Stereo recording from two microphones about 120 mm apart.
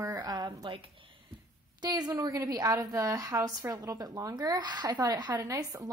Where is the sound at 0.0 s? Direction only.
35° right (ahead or behind).